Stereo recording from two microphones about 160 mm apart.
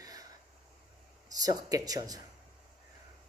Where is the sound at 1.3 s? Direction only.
25° right (ahead or behind).